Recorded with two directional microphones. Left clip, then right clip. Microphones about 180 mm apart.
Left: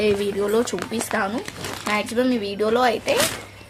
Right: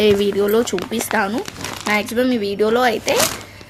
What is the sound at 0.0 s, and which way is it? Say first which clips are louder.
Speech: right 6 dB; 35° right (ahead or behind).